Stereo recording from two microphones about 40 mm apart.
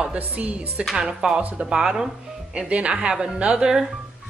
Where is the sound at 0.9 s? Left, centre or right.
Centre.